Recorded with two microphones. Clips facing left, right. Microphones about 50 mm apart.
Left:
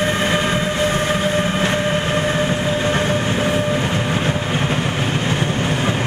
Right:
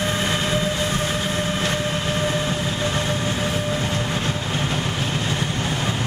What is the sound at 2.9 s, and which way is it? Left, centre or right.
Train, left.